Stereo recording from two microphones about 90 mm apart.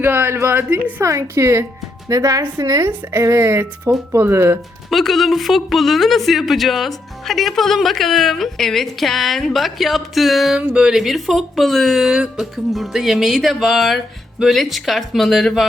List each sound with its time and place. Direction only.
0.0 s a woman's voice: 25° right (ahead or behind)
1.0 s a woman's voice: 35° right (ahead or behind)
4.9 s speech: centre (ahead or behind)